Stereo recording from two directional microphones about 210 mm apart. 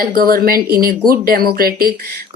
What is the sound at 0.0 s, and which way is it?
A woman's voice, 45° right (ahead or behind).